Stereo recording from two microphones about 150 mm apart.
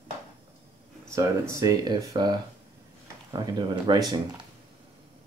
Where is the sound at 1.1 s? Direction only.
20° right (ahead or behind).